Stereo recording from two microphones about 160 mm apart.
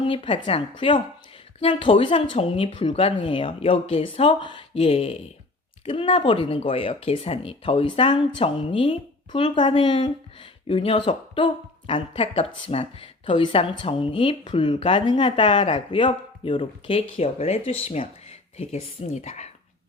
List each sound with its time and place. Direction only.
0.0 s speech: 35° left (ahead or behind)